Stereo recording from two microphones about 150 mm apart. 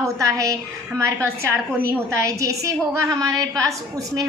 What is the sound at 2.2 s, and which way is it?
A woman's voice, 20° right (ahead or behind).